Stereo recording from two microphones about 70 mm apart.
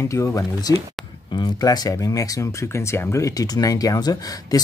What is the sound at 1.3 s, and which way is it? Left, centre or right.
Speech, left.